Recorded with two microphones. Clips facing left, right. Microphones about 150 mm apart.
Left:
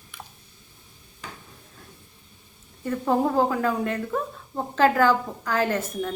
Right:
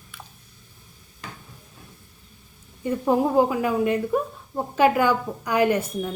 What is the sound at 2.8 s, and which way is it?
A woman's voice, 15° right (ahead or behind).